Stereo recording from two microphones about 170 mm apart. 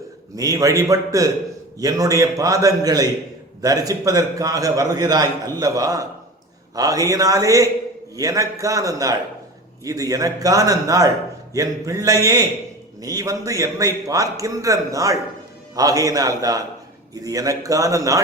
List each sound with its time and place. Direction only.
0.3 s a man's voice: 20° right (ahead or behind)